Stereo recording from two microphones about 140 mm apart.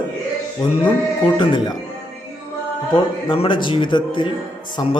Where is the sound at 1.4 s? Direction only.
35° left (ahead or behind).